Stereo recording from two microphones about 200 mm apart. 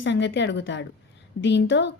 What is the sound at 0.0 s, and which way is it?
A woman's voice, 65° left (ahead or behind).